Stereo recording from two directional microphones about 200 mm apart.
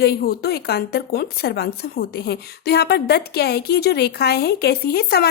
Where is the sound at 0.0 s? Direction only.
50° left (ahead or behind).